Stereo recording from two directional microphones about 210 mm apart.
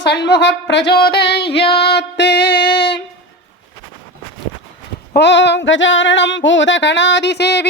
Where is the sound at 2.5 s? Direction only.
25° left (ahead or behind).